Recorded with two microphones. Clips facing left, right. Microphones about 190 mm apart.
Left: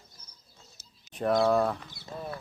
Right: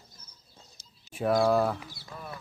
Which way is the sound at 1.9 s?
25° left (ahead or behind).